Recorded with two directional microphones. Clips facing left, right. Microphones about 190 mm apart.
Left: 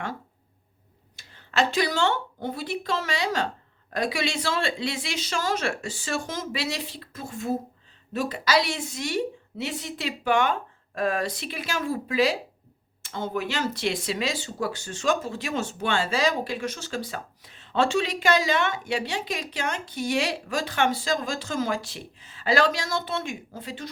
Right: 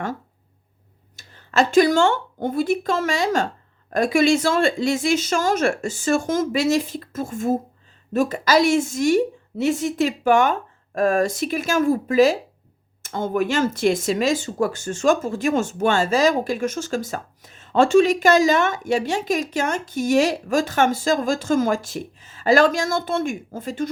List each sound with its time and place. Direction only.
1.1 s speech: 45° right (ahead or behind)